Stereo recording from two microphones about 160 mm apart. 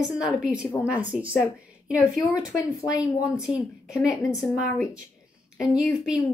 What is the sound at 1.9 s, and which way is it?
Speech, 20° left (ahead or behind).